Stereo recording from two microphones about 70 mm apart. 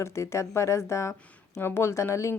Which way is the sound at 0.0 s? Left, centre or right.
Left.